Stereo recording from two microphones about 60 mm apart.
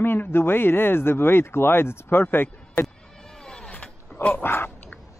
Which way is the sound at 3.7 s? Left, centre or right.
Left.